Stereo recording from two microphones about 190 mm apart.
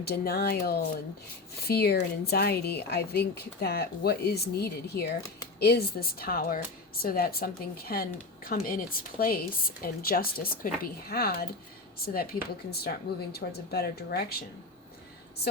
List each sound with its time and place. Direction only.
0.0 s speech: 55° left (ahead or behind)